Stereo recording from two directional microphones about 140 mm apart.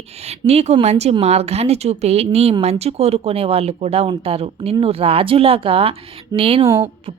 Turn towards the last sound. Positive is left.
turn(degrees=-40)  # may be behind; listen again after turning